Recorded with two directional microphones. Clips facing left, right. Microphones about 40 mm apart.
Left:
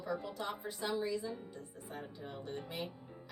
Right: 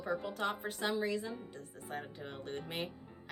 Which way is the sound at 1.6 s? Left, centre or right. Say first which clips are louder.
Right 3 dB; right.